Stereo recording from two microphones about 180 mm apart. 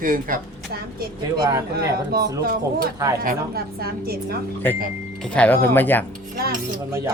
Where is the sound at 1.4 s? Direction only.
15° right (ahead or behind).